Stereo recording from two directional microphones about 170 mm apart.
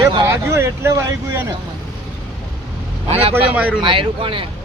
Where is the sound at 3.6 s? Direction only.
10° right (ahead or behind).